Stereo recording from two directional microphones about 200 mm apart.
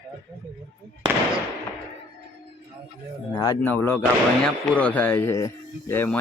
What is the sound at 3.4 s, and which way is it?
Speech, 20° left (ahead or behind).